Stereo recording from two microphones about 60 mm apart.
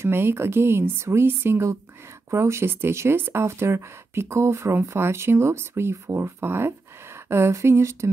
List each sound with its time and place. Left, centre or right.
0.0 s speech: right
2.3 s speech: right
3.2 s speech: right
3.4 s speech: right